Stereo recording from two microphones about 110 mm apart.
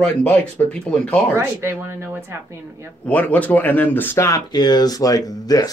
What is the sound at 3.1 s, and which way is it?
Speech, 15° left (ahead or behind).